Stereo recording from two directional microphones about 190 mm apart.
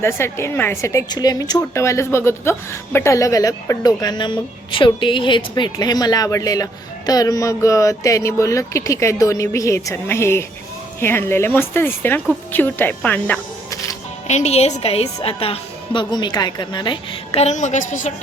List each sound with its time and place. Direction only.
0.0 s a woman's voice: 15° left (ahead or behind)
14.3 s a woman's voice: 35° left (ahead or behind)